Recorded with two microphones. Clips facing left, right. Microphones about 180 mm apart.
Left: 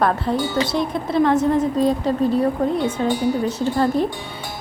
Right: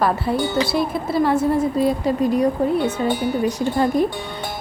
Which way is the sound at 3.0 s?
55° right (ahead or behind).